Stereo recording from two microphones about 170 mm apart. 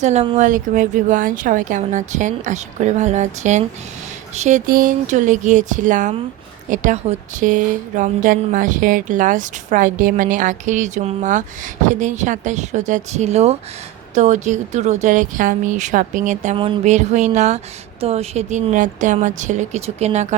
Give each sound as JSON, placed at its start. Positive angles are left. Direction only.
{"t": 0.0, "sound": "a woman's voice", "side_deg": -40}
{"t": 4.6, "sound": "a woman's voice", "side_deg": -60}